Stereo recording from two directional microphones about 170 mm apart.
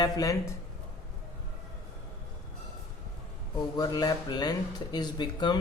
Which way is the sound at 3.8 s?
20° left (ahead or behind).